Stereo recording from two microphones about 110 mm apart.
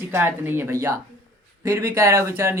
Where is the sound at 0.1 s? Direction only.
20° right (ahead or behind).